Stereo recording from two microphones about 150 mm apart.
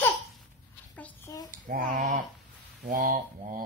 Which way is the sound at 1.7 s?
70° right (ahead or behind).